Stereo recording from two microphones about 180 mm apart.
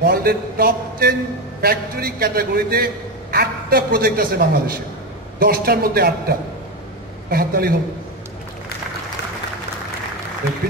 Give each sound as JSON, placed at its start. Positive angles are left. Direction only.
{"t": 0.0, "sound": "a man's voice", "side_deg": -60}